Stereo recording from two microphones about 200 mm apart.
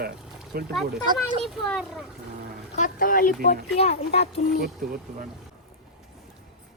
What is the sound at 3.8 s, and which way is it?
Speech, 30° left (ahead or behind).